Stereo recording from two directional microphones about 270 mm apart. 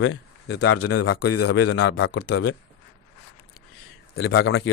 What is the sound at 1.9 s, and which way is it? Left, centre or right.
Speech, left.